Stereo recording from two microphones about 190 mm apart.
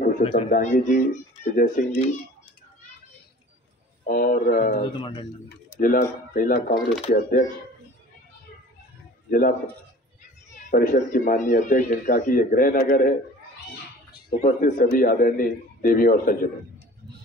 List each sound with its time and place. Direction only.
0.2 s speech: 30° left (ahead or behind)
0.5 s speech: 45° left (ahead or behind)
4.0 s speech: 50° left (ahead or behind)
4.8 s speech: 25° left (ahead or behind)
5.8 s speech: 45° left (ahead or behind)
9.3 s speech: 45° left (ahead or behind)
10.7 s speech: 50° left (ahead or behind)
14.4 s speech: 50° left (ahead or behind)